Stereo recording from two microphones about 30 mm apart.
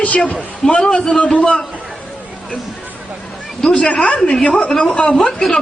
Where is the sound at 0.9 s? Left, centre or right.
Left.